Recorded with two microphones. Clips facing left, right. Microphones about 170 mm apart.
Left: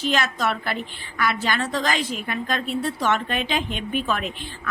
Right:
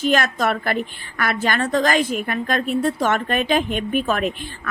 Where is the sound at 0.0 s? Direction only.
50° right (ahead or behind).